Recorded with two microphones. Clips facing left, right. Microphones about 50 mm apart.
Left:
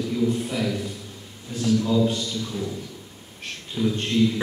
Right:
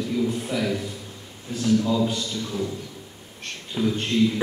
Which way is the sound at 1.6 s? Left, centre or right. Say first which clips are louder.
Right 1 dB; right.